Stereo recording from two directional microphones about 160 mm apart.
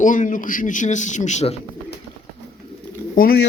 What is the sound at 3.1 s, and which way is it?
Speech, 65° left (ahead or behind).